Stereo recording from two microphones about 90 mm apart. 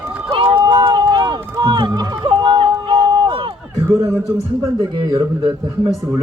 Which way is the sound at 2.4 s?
60° right (ahead or behind).